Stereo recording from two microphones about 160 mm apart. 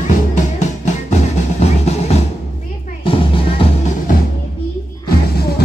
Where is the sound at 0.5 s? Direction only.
45° left (ahead or behind).